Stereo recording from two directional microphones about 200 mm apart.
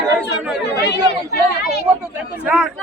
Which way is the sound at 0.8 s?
55° left (ahead or behind).